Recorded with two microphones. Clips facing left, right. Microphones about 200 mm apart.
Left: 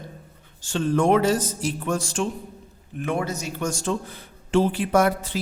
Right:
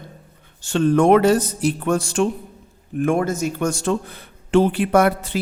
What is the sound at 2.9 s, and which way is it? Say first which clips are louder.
Speech: right 7 dB; 50° right (ahead or behind).